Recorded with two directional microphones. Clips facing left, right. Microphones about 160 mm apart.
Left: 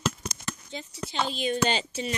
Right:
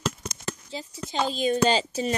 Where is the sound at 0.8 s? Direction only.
35° right (ahead or behind).